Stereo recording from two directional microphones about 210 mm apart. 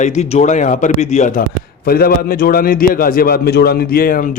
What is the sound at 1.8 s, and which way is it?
A man's voice, 45° left (ahead or behind).